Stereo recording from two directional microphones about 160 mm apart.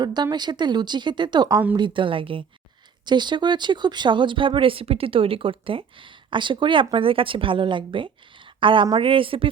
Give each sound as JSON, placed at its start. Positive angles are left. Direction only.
{"t": 0.0, "sound": "speech", "side_deg": -25}